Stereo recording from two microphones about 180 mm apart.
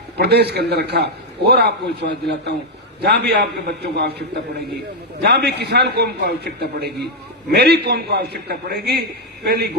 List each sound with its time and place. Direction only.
0.2 s a man's voice: 65° right (ahead or behind)